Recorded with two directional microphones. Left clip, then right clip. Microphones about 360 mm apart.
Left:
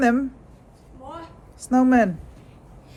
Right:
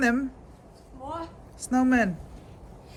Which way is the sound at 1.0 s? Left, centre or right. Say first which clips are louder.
Right 2 dB; centre.